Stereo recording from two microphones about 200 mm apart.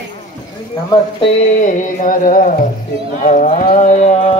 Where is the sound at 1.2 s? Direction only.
40° left (ahead or behind).